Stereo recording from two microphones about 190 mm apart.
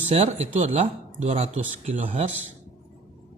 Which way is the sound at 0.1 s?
35° right (ahead or behind).